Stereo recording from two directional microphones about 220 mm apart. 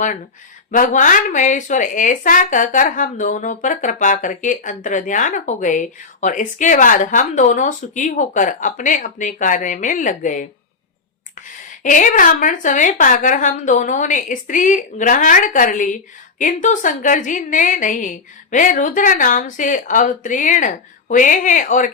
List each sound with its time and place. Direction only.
0.7 s speech: 35° left (ahead or behind)
11.8 s speech: 35° left (ahead or behind)